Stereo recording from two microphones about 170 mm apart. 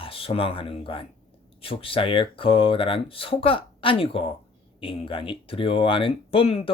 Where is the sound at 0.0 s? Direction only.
35° left (ahead or behind).